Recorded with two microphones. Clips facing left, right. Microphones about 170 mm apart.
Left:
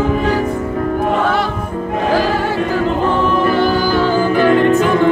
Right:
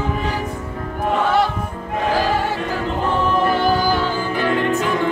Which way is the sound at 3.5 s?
90° left.